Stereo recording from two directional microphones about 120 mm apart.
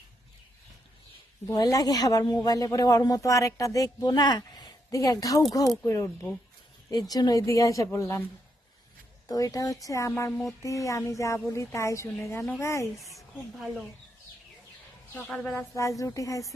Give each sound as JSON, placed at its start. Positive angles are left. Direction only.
{"t": 1.5, "sound": "speech", "side_deg": 30}
{"t": 9.2, "sound": "speech", "side_deg": 30}
{"t": 13.0, "sound": "a woman's voice", "side_deg": 0}
{"t": 15.3, "sound": "a woman's voice", "side_deg": 5}
{"t": 15.7, "sound": "speech", "side_deg": 25}